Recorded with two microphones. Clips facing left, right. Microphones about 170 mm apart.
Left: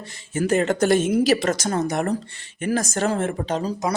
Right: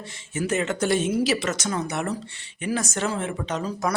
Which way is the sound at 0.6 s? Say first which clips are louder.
Left 4 dB; 45° left (ahead or behind).